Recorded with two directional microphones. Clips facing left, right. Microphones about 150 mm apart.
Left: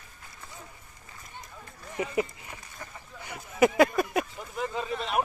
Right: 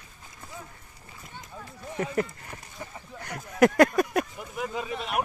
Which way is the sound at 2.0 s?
5° left (ahead or behind).